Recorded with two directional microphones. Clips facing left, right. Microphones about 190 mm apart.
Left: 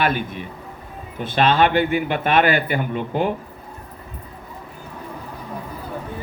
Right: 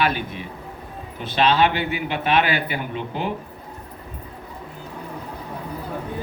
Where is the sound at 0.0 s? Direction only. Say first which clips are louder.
Left 1 dB; 50° left (ahead or behind).